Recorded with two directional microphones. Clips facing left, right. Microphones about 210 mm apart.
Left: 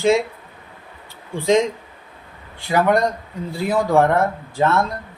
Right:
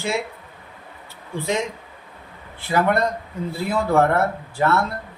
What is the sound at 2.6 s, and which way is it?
Speech, 15° left (ahead or behind).